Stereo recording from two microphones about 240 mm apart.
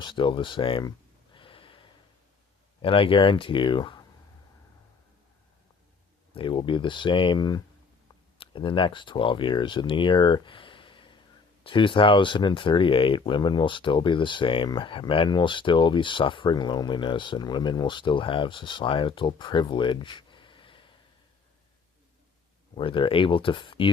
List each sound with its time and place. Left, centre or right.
0.0 s a sound: centre
2.8 s speech: left
6.3 s speech: left
22.7 s speech: left